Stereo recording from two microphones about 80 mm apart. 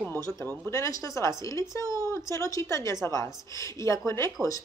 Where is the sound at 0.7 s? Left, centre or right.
Left.